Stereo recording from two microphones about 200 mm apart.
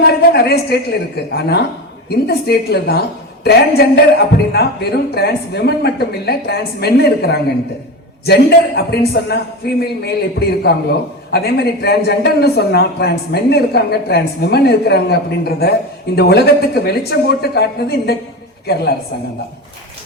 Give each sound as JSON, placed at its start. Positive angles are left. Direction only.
{"t": 0.3, "sound": "a man's voice", "side_deg": 55}